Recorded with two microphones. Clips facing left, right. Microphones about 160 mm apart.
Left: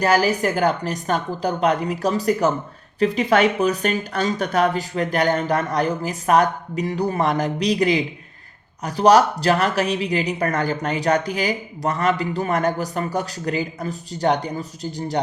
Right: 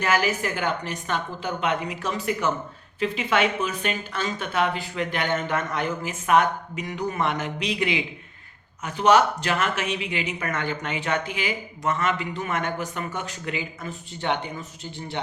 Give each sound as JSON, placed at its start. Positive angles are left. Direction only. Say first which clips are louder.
{"t": 0.0, "sound": "speech", "louder": "left 6 dB", "side_deg": 35}